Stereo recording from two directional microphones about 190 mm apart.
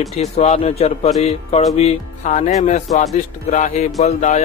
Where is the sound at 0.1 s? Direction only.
35° left (ahead or behind).